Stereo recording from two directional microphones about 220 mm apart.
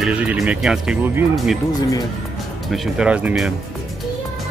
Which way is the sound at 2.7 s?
Centre (ahead or behind).